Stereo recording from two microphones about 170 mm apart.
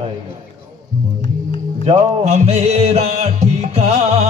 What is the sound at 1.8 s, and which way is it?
Music, 40° right (ahead or behind).